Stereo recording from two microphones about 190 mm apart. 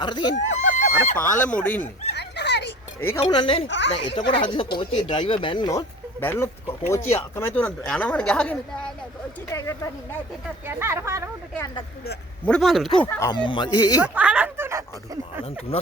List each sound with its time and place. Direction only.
0.0 s speech: 25° left (ahead or behind)
0.3 s a sound: 40° left (ahead or behind)
1.1 s speech: 10° left (ahead or behind)
2.1 s a sound: 65° left (ahead or behind)
3.2 s speech: 25° left (ahead or behind)
3.7 s speech: 70° left (ahead or behind)
4.1 s speech: 25° left (ahead or behind); by 8.9 s 5° left (ahead or behind)
9.5 s speech: 15° left (ahead or behind)
10.7 s speech: 15° right (ahead or behind)
12.5 s speech: centre (ahead or behind)
13.1 s speech: 15° left (ahead or behind)
14.0 s speech: 5° right (ahead or behind)